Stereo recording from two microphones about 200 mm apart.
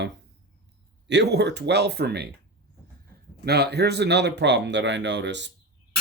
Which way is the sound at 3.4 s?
55° right (ahead or behind).